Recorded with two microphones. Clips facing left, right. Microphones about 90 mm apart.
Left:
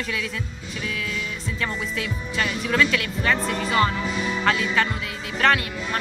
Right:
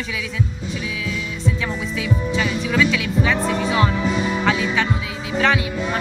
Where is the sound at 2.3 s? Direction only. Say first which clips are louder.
Even; centre (ahead or behind).